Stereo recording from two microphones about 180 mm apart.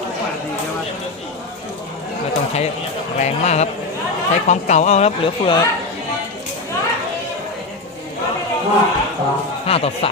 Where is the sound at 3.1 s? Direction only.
40° left (ahead or behind).